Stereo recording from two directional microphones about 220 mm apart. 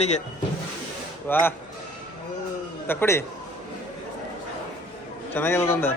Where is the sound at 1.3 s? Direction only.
10° left (ahead or behind).